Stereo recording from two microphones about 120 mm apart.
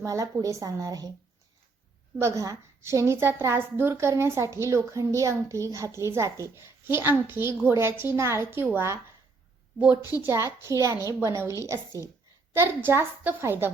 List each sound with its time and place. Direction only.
0.0 s a woman's voice: 30° right (ahead or behind)
2.1 s a woman's voice: 25° right (ahead or behind)
10.2 s a woman's voice: 25° right (ahead or behind)